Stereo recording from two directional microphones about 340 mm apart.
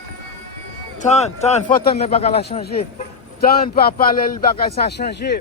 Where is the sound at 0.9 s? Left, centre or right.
Centre.